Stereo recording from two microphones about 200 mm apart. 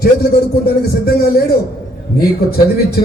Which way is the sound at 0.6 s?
50° left (ahead or behind).